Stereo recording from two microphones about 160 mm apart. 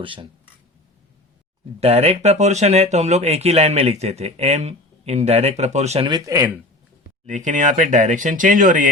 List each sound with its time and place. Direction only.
0.0 s speech: 30° right (ahead or behind)
1.8 s speech: 40° right (ahead or behind)
6.1 s speech: 20° right (ahead or behind)
7.3 s speech: 50° right (ahead or behind)